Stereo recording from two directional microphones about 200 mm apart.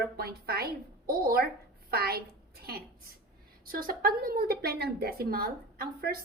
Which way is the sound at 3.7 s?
45° right (ahead or behind).